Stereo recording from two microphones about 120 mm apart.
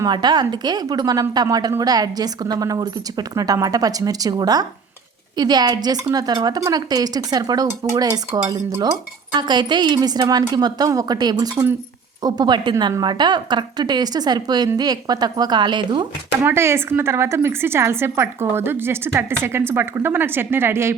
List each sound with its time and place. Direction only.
0.0 s a woman's voice: 35° right (ahead or behind)
16.4 s a woman's voice: 20° right (ahead or behind)